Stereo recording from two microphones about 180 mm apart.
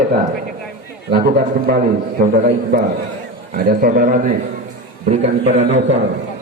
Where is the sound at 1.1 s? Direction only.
55° right (ahead or behind).